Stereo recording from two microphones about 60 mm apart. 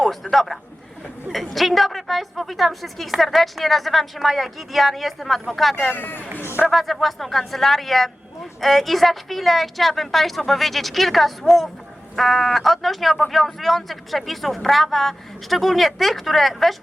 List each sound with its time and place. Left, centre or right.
0.0 s a man's voice: centre
5.9 s speech: left
6.7 s a woman's voice: centre